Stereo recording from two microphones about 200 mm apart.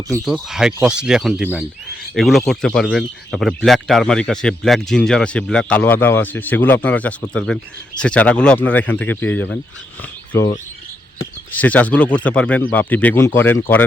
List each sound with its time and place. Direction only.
0.3 s speech: centre (ahead or behind)